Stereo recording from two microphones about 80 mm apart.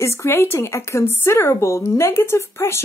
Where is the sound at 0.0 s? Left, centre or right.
Left.